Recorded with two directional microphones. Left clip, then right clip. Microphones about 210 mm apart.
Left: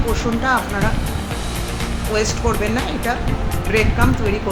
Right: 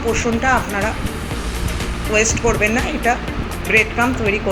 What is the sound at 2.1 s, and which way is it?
Speech, centre (ahead or behind).